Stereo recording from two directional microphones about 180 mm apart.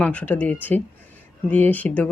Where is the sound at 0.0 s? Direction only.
10° left (ahead or behind).